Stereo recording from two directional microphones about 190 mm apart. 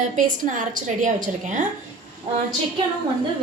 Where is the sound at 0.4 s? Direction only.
40° right (ahead or behind).